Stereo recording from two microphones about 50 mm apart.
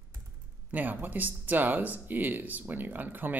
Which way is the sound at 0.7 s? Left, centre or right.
Right.